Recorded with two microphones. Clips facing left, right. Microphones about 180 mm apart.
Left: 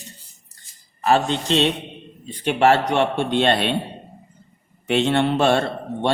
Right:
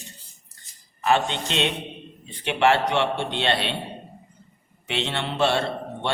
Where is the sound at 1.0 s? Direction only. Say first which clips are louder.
Left 3 dB; 40° left (ahead or behind).